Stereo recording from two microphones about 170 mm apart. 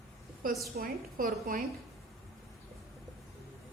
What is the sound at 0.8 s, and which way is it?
Speech, 60° right (ahead or behind).